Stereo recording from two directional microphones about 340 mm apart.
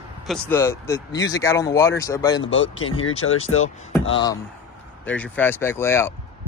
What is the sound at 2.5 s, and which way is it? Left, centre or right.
Speech, left.